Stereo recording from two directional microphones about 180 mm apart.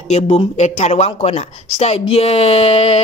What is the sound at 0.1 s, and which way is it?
Speech, 40° left (ahead or behind).